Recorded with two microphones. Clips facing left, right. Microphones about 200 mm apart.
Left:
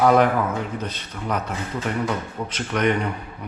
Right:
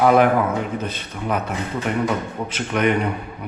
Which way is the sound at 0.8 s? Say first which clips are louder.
Right 3 dB; 10° right (ahead or behind).